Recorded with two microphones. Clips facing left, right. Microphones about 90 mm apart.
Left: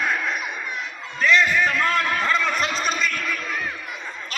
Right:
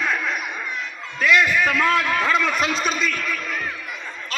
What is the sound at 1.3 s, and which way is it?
A man's voice, 5° right (ahead or behind).